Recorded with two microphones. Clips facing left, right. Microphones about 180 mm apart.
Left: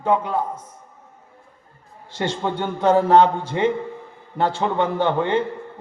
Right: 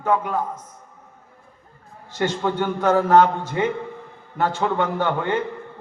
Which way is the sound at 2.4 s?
25° left (ahead or behind).